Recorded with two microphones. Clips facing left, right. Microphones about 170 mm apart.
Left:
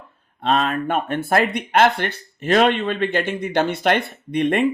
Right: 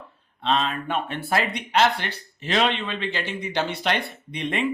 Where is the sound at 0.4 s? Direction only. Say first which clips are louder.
Left 4 dB; 50° left (ahead or behind).